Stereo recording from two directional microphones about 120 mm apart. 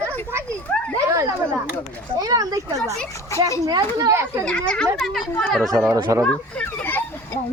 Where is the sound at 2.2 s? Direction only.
30° right (ahead or behind).